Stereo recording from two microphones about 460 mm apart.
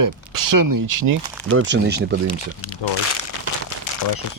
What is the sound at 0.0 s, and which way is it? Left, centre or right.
Speech, right.